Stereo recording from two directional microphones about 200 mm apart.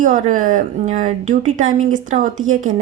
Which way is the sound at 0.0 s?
40° right (ahead or behind).